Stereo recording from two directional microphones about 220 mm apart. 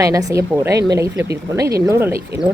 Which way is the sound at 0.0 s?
15° right (ahead or behind).